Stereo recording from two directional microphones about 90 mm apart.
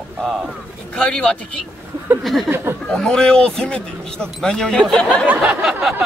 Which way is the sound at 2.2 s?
Centre (ahead or behind).